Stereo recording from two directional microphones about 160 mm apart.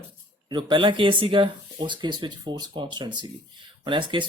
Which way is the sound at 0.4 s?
30° right (ahead or behind).